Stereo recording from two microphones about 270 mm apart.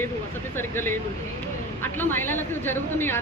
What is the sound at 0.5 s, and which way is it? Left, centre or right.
A woman's voice, centre.